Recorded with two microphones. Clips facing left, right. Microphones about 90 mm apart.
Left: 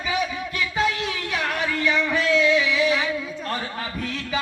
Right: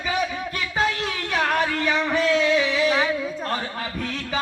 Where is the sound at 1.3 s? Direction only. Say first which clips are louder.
Right 4 dB; 40° right (ahead or behind).